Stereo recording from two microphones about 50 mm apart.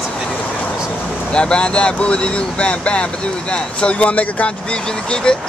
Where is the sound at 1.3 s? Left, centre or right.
Centre.